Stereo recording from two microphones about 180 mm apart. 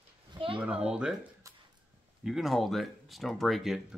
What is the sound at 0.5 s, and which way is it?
Speech, 5° right (ahead or behind).